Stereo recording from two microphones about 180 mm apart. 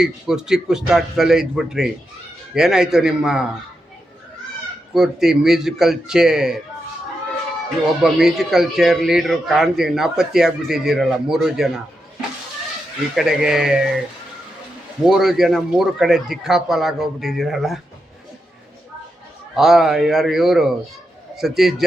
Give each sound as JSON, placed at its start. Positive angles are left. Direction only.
{"t": 0.0, "sound": "speech", "side_deg": -5}
{"t": 4.9, "sound": "speech", "side_deg": 0}
{"t": 8.0, "sound": "speech", "side_deg": 0}
{"t": 13.1, "sound": "speech", "side_deg": -5}
{"t": 15.0, "sound": "speech", "side_deg": 0}
{"t": 19.5, "sound": "speech", "side_deg": 0}